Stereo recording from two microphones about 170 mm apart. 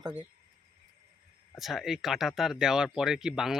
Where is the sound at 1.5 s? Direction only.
Centre (ahead or behind).